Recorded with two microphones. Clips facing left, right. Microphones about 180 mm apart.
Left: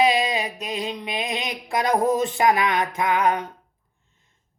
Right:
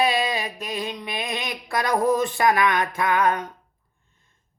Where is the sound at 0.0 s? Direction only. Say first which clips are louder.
Left 2 dB; 15° left (ahead or behind).